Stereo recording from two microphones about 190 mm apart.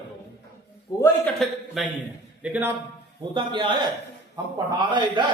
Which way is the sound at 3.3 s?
25° right (ahead or behind).